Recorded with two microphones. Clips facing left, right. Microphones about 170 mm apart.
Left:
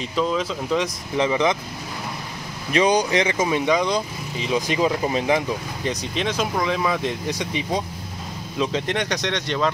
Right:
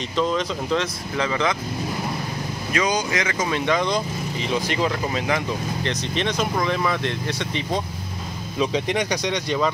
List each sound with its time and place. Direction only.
0.1 s speech: 5° left (ahead or behind)
1.1 s speech: 20° left (ahead or behind)
2.7 s speech: 30° left (ahead or behind)
3.4 s speech: 15° left (ahead or behind)
5.9 s speech: 5° left (ahead or behind)
8.5 s speech: centre (ahead or behind)